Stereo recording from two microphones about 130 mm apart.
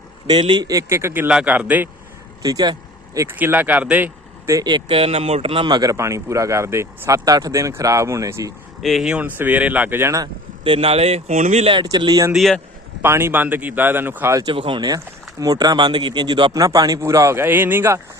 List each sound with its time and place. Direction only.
0.3 s speech: 35° right (ahead or behind); by 1.9 s 10° right (ahead or behind)
2.4 s speech: 30° right (ahead or behind)
3.2 s speech: 15° right (ahead or behind)
4.5 s speech: 30° right (ahead or behind)
4.9 s speech: 50° right (ahead or behind)
5.6 s speech: 30° right (ahead or behind)
8.8 s speech: centre (ahead or behind); by 10.2 s 20° right (ahead or behind)
10.6 s speech: 45° right (ahead or behind); by 11.7 s 60° right (ahead or behind)
11.7 s speech: 35° right (ahead or behind)
12.3 s speech: centre (ahead or behind)
13.0 s speech: 20° right (ahead or behind)
14.5 s speech: 40° right (ahead or behind); by 18.0 s 15° right (ahead or behind)